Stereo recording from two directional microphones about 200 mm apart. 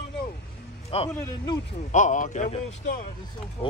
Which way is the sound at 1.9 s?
40° left (ahead or behind).